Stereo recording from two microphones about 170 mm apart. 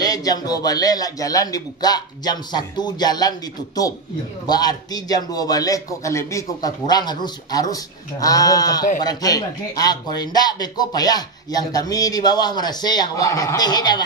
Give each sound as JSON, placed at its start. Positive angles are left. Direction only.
{"t": 0.0, "sound": "a man's voice", "side_deg": 20}